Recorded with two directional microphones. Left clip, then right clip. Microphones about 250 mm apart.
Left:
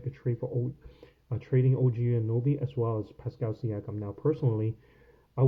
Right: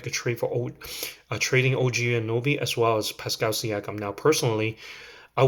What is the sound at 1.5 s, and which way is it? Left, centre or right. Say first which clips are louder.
Speech: right 6 dB; centre.